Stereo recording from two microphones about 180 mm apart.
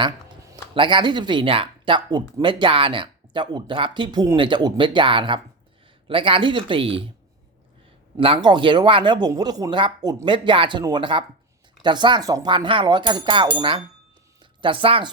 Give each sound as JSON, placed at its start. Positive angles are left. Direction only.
{"t": 0.5, "sound": "speech", "side_deg": -25}
{"t": 8.1, "sound": "speech", "side_deg": -30}